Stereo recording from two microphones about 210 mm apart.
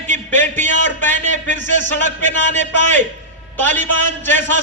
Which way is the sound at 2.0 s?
35° right (ahead or behind).